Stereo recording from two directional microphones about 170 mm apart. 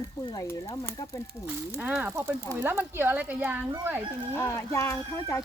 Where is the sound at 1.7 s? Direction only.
10° right (ahead or behind).